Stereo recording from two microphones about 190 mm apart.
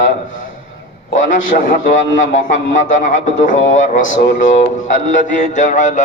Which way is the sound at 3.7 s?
40° left (ahead or behind).